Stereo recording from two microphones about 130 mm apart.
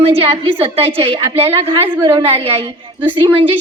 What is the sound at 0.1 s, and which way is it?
A woman's voice, 45° right (ahead or behind).